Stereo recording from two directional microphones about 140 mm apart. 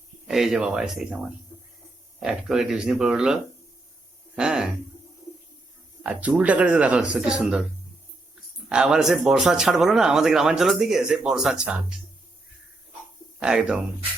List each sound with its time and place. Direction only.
0.3 s speech: 5° right (ahead or behind)
6.0 s speech: 10° right (ahead or behind)
8.7 s speech: 5° right (ahead or behind)
13.4 s speech: 5° right (ahead or behind)